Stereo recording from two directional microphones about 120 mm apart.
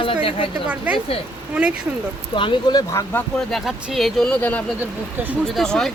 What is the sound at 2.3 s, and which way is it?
Speech, 45° left (ahead or behind).